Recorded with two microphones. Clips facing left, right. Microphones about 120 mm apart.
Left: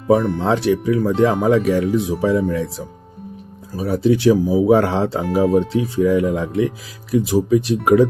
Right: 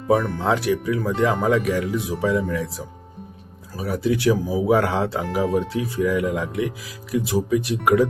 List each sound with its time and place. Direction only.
0.1 s speech: 30° left (ahead or behind)